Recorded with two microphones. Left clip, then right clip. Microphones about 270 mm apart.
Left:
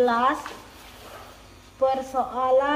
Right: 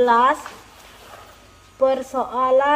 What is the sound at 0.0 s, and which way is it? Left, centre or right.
Speech, centre.